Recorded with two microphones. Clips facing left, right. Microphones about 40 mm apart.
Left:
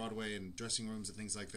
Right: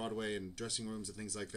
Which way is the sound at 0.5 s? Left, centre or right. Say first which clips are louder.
Right 1 dB; centre.